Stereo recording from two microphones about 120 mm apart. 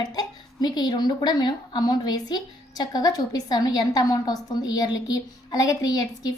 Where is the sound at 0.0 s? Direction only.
35° left (ahead or behind).